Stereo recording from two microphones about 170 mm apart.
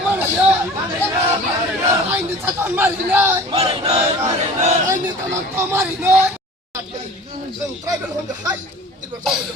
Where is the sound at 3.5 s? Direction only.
35° right (ahead or behind).